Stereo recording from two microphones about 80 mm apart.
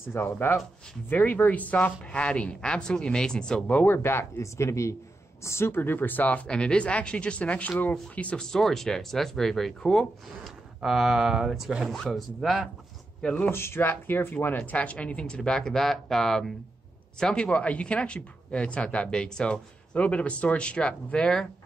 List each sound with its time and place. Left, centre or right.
0.0 s speech: left; by 12.6 s centre
13.2 s speech: centre
13.5 s speech: left; by 21.5 s centre